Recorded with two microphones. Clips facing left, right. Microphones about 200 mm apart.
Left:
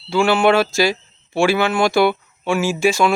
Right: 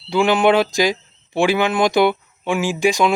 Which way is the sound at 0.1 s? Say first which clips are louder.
Even; 15° right (ahead or behind).